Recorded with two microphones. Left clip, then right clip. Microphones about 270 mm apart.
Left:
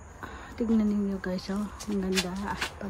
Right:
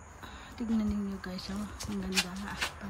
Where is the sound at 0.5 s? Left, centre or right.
Centre.